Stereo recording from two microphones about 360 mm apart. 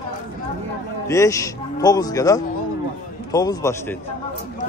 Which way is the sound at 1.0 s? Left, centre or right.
Centre.